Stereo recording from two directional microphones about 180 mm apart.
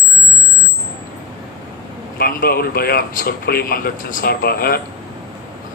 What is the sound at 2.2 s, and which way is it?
A man's voice, 55° left (ahead or behind).